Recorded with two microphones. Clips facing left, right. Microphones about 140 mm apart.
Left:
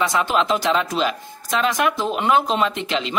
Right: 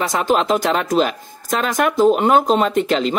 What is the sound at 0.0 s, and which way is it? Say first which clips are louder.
Speech: right 2 dB; 45° right (ahead or behind).